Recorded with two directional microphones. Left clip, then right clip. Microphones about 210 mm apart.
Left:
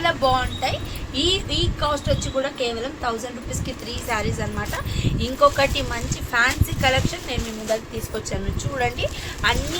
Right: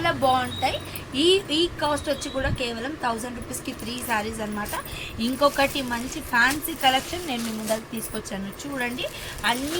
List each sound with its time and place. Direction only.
0.0 s a child's voice: 25° left (ahead or behind)
5.0 s a woman's voice: 30° left (ahead or behind)
8.8 s a woman's voice: 35° left (ahead or behind)